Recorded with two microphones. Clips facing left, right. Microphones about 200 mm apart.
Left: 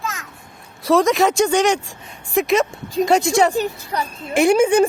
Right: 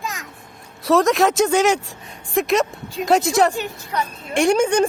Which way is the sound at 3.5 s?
35° left (ahead or behind).